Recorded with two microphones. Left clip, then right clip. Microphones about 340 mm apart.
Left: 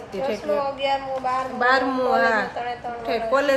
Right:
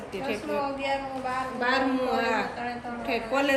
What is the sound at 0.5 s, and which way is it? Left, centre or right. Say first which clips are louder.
Speech: left 6 dB; left.